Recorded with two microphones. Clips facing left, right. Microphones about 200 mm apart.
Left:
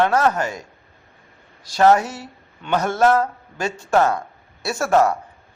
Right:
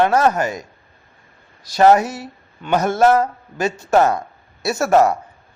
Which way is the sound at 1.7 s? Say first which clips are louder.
Right 2 dB; 10° right (ahead or behind).